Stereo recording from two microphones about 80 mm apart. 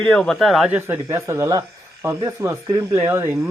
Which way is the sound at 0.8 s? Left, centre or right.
Right.